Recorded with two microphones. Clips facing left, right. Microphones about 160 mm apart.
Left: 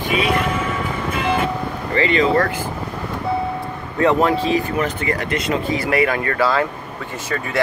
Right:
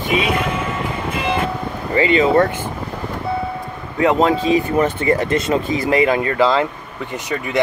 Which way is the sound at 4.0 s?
20° right (ahead or behind).